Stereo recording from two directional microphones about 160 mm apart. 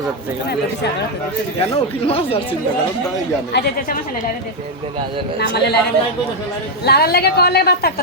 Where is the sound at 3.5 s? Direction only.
90° left.